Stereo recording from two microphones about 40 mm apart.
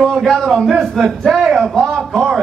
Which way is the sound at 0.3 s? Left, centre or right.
Centre.